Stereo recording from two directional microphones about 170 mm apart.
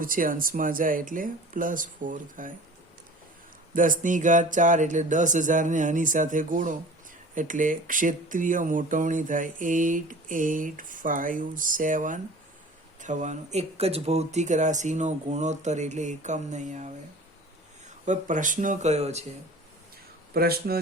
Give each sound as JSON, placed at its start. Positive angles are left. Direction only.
{"t": 0.0, "sound": "speech", "side_deg": -55}
{"t": 3.8, "sound": "speech", "side_deg": -50}
{"t": 18.0, "sound": "speech", "side_deg": -45}
{"t": 20.3, "sound": "speech", "side_deg": -65}